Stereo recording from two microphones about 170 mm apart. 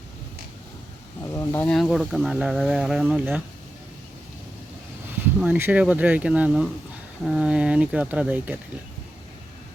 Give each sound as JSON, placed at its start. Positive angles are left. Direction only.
{"t": 1.3, "sound": "a sound", "side_deg": 15}
{"t": 1.6, "sound": "speech", "side_deg": 0}
{"t": 5.2, "sound": "speech", "side_deg": -10}